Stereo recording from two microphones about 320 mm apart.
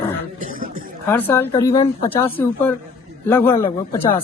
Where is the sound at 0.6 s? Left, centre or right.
Right.